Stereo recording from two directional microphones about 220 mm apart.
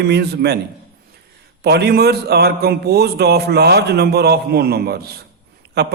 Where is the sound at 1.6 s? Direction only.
50° right (ahead or behind).